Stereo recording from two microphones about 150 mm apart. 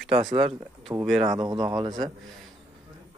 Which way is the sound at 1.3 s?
30° right (ahead or behind).